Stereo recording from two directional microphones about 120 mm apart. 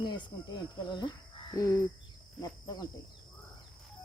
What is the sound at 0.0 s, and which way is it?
Speech, 40° left (ahead or behind).